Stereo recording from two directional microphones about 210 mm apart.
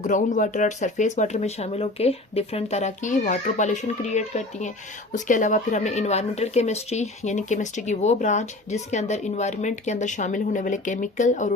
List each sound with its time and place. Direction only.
0.0 s speech: 35° left (ahead or behind)